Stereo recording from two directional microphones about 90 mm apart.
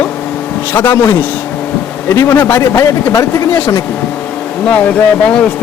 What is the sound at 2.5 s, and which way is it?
Speech, 30° left (ahead or behind).